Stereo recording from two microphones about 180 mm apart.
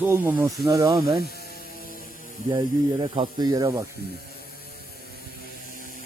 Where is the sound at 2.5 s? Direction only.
20° right (ahead or behind).